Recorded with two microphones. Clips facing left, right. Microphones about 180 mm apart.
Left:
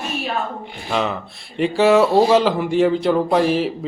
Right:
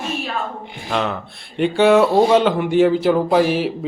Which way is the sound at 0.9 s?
Centre (ahead or behind).